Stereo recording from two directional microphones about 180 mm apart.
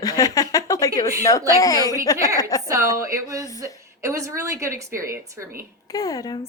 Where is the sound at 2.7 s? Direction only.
15° right (ahead or behind).